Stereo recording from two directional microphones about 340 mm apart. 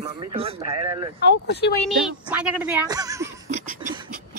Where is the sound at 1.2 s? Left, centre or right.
Left.